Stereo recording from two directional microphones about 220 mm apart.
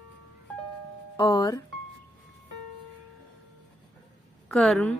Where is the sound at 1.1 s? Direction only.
20° left (ahead or behind).